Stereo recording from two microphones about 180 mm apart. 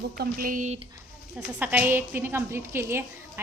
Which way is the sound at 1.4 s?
10° right (ahead or behind).